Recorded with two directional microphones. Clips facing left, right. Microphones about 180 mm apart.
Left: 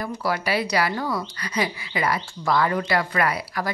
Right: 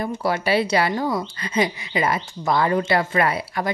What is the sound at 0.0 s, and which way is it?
Speech, 25° right (ahead or behind).